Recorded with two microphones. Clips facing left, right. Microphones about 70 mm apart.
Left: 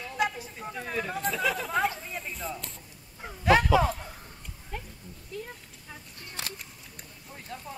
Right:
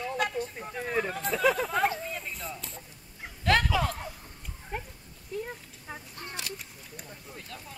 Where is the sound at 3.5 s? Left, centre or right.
Centre.